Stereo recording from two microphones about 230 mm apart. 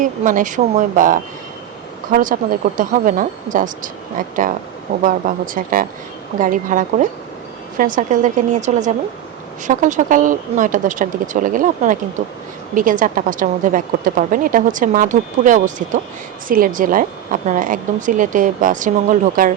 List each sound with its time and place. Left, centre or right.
0.0 s a woman's voice: right
5.0 s a woman's voice: right